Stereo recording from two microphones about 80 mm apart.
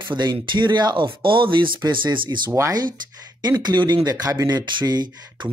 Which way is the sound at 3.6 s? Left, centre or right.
Right.